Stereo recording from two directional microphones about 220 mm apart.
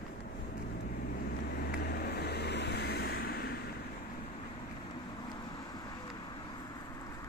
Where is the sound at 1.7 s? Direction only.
45° left (ahead or behind).